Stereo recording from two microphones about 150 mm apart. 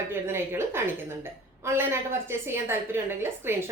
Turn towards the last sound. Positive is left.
turn(degrees=-15)  # may be behind; listen again after turning